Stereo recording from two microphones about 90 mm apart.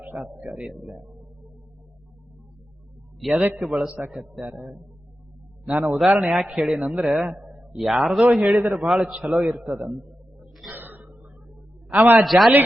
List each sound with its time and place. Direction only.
0.0 s a man's voice: 15° right (ahead or behind)
3.2 s a man's voice: centre (ahead or behind)
4.5 s a man's voice: 15° right (ahead or behind)
10.7 s a sound: 20° right (ahead or behind)
11.9 s a man's voice: 20° right (ahead or behind)
12.2 s a man's voice: centre (ahead or behind)